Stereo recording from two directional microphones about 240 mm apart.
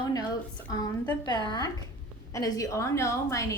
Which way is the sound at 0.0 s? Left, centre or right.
Centre.